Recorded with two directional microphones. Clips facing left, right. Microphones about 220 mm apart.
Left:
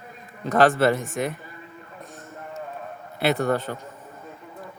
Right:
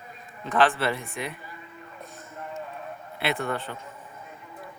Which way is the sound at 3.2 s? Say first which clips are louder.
Left 6 dB; 40° left (ahead or behind).